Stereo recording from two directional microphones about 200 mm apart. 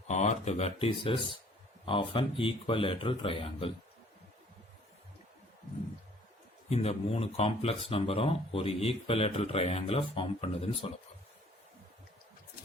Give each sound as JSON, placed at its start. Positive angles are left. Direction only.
{"t": 0.1, "sound": "speech", "side_deg": 35}
{"t": 6.7, "sound": "speech", "side_deg": 30}